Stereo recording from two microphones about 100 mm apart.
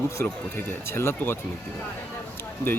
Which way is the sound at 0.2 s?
25° left (ahead or behind).